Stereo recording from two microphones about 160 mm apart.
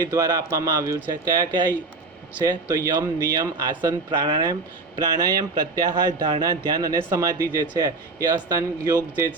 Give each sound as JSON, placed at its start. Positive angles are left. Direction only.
{"t": 0.1, "sound": "speech", "side_deg": -20}